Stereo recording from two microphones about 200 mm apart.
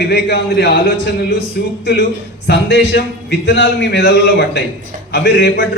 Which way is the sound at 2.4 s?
55° left (ahead or behind).